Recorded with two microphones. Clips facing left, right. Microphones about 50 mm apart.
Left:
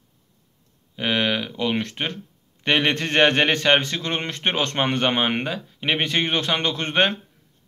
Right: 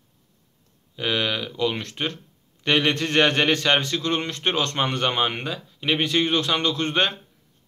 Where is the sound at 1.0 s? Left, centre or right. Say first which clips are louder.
Left 2 dB; left.